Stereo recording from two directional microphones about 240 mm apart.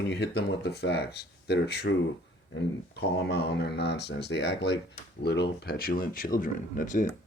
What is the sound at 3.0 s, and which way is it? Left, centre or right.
Speech, left.